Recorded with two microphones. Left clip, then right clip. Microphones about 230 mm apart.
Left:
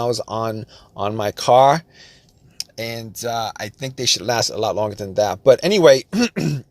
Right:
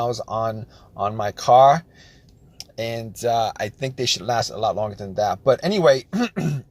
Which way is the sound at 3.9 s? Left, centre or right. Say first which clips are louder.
Left 4 dB; left.